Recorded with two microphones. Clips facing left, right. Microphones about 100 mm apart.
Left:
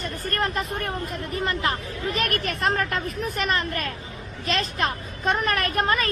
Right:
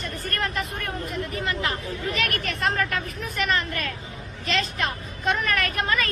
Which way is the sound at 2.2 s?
40° left (ahead or behind).